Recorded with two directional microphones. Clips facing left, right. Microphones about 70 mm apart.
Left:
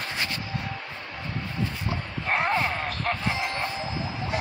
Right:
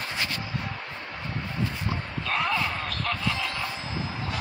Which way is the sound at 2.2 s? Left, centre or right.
Left.